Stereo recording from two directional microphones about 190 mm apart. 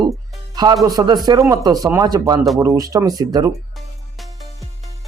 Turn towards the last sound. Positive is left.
turn(degrees=-20)  # may be behind; listen again after turning